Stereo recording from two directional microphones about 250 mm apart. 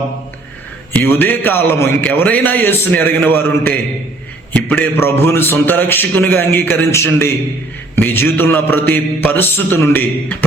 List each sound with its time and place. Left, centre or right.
0.9 s a man's voice: centre